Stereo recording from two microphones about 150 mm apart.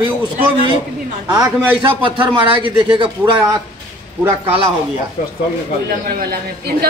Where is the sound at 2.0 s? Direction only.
35° right (ahead or behind).